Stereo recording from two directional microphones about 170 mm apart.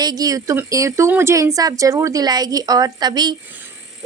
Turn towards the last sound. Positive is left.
turn(degrees=-25)  # may be behind; listen again after turning